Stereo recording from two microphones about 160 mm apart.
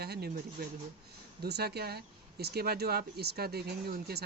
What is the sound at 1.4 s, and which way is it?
Speech, 85° right.